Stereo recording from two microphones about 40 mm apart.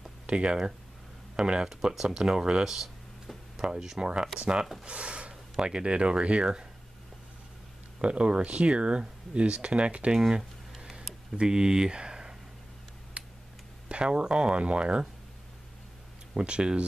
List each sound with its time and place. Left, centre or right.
0.3 s speech: right
1.7 s speech: centre
2.6 s speech: centre
8.0 s speech: right
11.3 s speech: centre
13.2 s tick-tock: right
13.8 s speech: right
16.3 s speech: right